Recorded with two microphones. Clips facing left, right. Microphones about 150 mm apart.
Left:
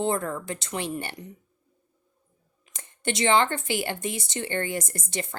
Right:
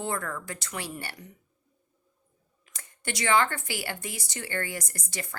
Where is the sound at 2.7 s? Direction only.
25° left (ahead or behind).